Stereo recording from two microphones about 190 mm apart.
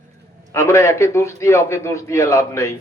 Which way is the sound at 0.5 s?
15° left (ahead or behind).